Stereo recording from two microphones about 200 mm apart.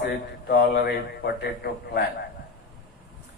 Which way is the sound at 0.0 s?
55° left (ahead or behind).